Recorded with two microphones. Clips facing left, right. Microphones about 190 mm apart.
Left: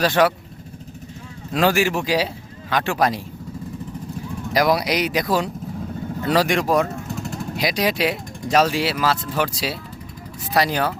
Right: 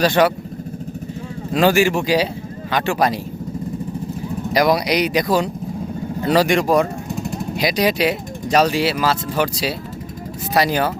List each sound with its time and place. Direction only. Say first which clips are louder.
0.0 s speech: right 2 dB; centre (ahead or behind)
1.5 s speech: right 3 dB; centre (ahead or behind)
4.5 s speech: right 2 dB; centre (ahead or behind)
7.1 s vehicle: right 4 dB; 15° right (ahead or behind)
7.5 s speech: right 3 dB; centre (ahead or behind)